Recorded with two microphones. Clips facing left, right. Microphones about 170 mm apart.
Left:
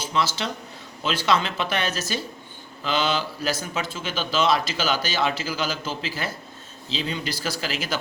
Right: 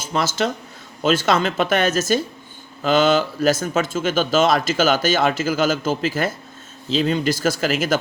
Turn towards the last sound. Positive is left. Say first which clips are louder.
# right 9 dB
turn(degrees=-50)  # may be behind; listen again after turning